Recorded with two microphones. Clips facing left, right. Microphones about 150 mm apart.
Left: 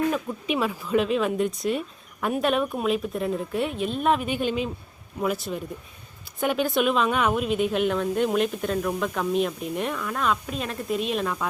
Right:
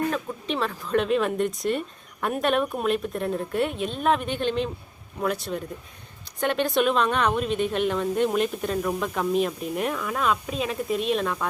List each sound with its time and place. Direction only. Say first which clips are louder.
0.1 s a woman's voice: left 2 dB; 10° left (ahead or behind)